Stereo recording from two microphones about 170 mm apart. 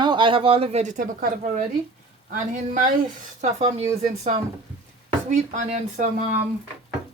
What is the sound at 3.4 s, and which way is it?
Speech, 40° right (ahead or behind).